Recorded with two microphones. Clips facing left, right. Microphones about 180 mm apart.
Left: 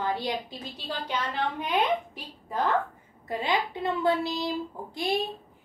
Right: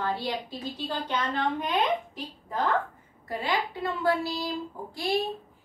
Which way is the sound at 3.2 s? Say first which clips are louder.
Left 1 dB; 20° left (ahead or behind).